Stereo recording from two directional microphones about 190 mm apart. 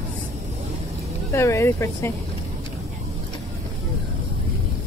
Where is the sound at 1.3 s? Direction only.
15° left (ahead or behind).